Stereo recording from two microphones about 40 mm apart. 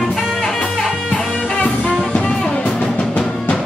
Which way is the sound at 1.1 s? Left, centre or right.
Left.